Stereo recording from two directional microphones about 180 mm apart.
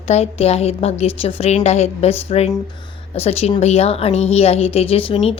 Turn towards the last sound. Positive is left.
turn(degrees=30)  # may be behind; listen again after turning